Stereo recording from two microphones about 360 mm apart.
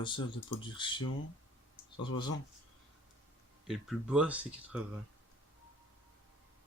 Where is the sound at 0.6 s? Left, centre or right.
Centre.